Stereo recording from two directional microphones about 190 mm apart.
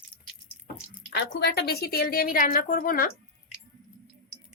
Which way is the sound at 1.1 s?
60° left (ahead or behind).